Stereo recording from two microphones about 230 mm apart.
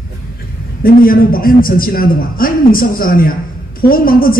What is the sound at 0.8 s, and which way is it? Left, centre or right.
A man's voice, left.